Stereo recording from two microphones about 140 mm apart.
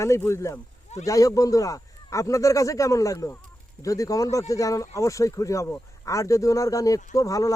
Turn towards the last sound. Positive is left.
turn(degrees=25)  # may be behind; listen again after turning